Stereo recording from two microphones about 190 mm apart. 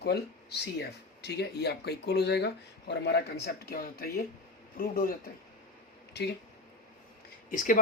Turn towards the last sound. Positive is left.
turn(degrees=45)  # may be behind; listen again after turning